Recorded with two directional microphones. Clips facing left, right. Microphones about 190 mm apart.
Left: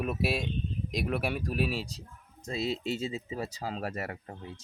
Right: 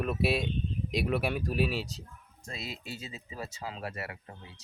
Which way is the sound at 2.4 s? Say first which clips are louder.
Left 10 dB; 25° left (ahead or behind).